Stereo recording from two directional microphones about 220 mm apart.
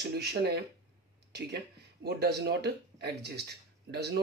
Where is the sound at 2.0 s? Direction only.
50° right (ahead or behind).